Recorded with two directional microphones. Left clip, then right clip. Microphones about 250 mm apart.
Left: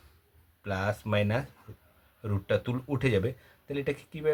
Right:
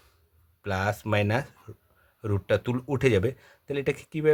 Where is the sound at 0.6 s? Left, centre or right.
Right.